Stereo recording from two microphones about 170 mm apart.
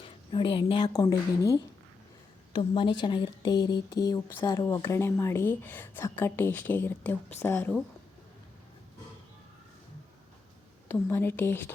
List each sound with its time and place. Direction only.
0.0 s a woman's voice: 30° left (ahead or behind); by 7.8 s 10° left (ahead or behind)
10.8 s a woman's voice: 15° left (ahead or behind)